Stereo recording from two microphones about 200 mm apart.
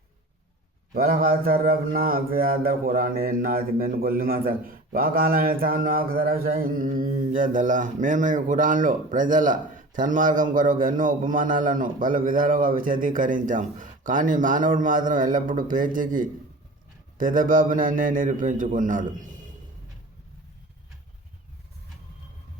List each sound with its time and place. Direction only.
0.9 s mantra: 45° right (ahead or behind)
17.2 s a man's voice: 40° right (ahead or behind)